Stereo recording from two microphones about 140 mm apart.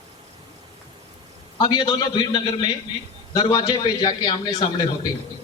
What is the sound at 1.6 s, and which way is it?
A man's voice, 35° left (ahead or behind).